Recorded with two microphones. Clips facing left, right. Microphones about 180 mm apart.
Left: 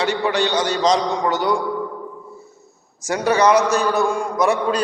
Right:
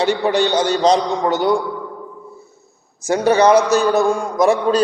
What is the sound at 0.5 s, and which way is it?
Speech, 55° right (ahead or behind).